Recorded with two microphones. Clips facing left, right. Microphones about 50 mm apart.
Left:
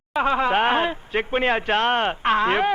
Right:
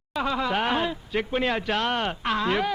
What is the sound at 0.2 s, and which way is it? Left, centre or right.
Speech, left.